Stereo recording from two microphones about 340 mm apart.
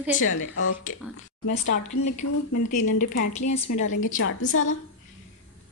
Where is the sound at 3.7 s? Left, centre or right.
Left.